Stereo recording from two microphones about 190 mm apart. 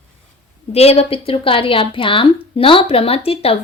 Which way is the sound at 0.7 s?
30° left (ahead or behind).